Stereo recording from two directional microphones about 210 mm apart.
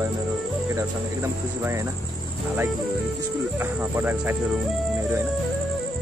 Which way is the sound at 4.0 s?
10° right (ahead or behind).